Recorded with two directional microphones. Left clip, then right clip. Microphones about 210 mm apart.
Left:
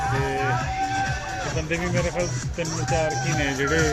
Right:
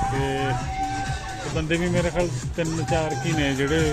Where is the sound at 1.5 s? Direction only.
35° right (ahead or behind).